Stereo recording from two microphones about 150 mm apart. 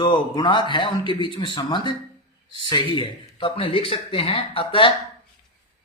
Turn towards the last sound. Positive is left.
turn(degrees=35)  # may be behind; listen again after turning